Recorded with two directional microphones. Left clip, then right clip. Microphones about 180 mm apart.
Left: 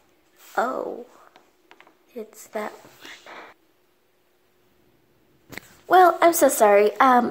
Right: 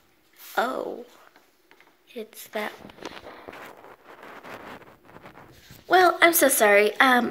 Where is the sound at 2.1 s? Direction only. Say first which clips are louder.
Left 1 dB; 15° left (ahead or behind).